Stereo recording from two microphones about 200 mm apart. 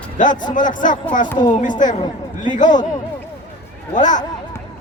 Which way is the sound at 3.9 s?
40° left (ahead or behind).